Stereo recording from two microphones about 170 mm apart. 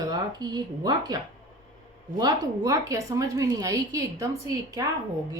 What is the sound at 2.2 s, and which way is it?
Speech, 20° right (ahead or behind).